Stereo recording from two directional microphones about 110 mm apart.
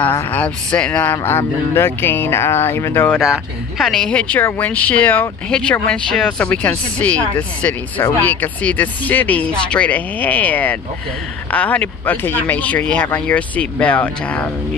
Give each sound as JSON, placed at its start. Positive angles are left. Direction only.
{"t": 0.0, "sound": "speech", "side_deg": 15}
{"t": 3.2, "sound": "speech", "side_deg": -5}